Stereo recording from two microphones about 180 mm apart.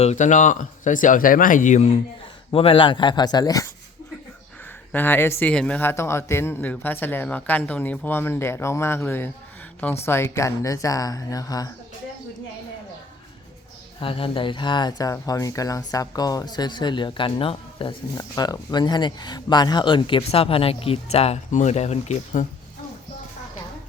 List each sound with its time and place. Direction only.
0.0 s speech: 40° left (ahead or behind); by 3.7 s 20° left (ahead or behind)
4.9 s speech: 10° left (ahead or behind)
14.0 s speech: 30° left (ahead or behind)